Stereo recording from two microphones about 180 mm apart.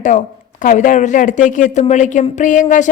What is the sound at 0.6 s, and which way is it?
Speech, 45° left (ahead or behind).